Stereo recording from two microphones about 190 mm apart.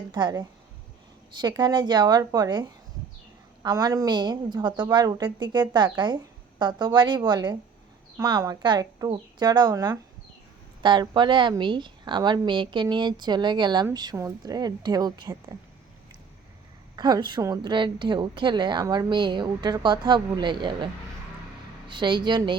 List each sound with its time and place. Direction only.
0.1 s a woman's voice: 20° right (ahead or behind)
16.9 s a woman's voice: 20° right (ahead or behind)
21.8 s a woman's voice: 25° right (ahead or behind)